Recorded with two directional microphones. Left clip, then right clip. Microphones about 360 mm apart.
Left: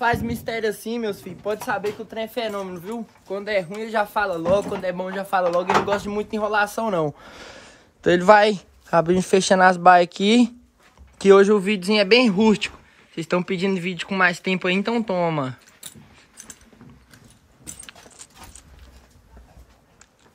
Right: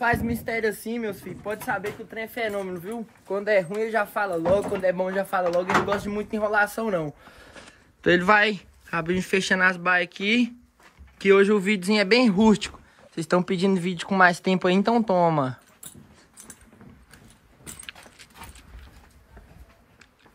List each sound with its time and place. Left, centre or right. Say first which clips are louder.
0.0 s speech: left 2 dB; centre
7.1 s speech: left 7 dB; left
8.0 s speech: left 5 dB; centre